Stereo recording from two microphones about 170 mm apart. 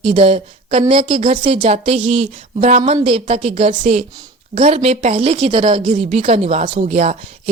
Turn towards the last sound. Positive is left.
turn(degrees=-40)  # may be behind; listen again after turning